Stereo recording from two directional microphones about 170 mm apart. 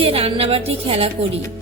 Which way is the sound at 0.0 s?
35° right (ahead or behind).